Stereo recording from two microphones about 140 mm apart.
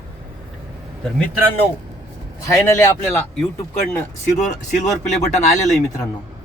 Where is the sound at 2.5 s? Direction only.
20° left (ahead or behind).